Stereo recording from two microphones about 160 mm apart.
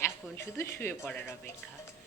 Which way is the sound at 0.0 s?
15° left (ahead or behind).